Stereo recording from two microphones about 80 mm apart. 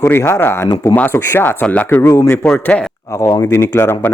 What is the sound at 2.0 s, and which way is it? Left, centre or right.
Speech, left.